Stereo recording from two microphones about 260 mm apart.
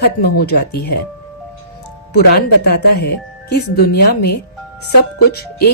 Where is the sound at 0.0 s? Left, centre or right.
Left.